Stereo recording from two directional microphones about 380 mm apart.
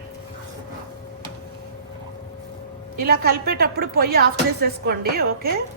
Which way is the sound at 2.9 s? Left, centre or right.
Right.